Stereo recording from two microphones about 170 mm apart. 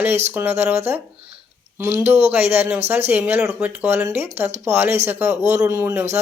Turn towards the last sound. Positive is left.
turn(degrees=-15)  # may be behind; listen again after turning